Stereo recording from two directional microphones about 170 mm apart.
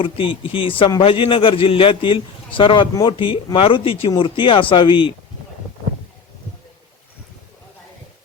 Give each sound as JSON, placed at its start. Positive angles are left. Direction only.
{"t": 0.0, "sound": "a man's voice", "side_deg": 30}